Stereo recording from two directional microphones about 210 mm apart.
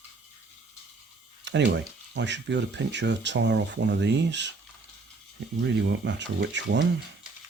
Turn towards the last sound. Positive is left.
turn(degrees=-55)  # may be behind; listen again after turning